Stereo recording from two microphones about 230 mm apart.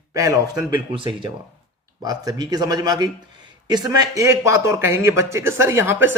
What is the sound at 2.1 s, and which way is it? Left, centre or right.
Speech, centre.